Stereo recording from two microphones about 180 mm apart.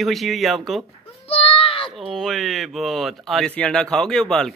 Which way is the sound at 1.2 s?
30° left (ahead or behind).